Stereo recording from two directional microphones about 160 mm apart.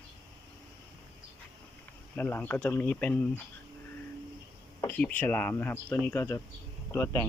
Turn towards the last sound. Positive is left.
turn(degrees=15)  # may be behind; listen again after turning